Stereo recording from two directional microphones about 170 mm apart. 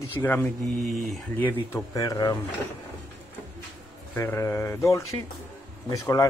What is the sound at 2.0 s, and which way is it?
Speech, 20° left (ahead or behind).